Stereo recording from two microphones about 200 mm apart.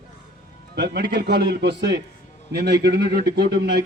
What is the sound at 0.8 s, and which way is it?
A man's voice, 55° right (ahead or behind).